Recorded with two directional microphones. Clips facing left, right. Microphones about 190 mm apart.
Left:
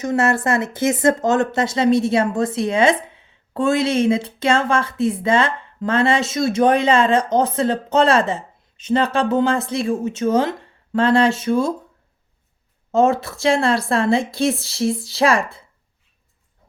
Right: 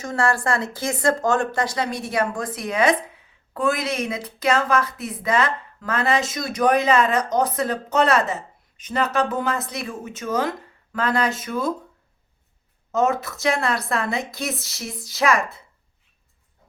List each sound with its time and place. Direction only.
0.0 s speech: 20° left (ahead or behind)
12.9 s speech: 30° left (ahead or behind)